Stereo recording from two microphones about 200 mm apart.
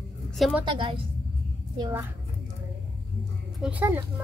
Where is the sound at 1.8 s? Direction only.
10° right (ahead or behind).